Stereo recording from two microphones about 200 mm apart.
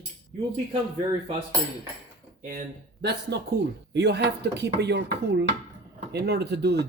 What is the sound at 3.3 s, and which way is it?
A man's voice, 55° right (ahead or behind).